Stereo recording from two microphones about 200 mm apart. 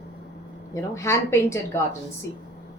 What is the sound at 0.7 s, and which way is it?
Speech, 15° left (ahead or behind).